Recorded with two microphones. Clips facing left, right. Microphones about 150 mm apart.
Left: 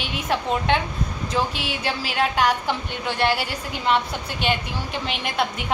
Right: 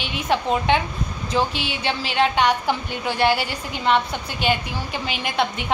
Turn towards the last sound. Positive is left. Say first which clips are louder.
# right 1 dB
turn(degrees=0)  # may be behind; listen again after turning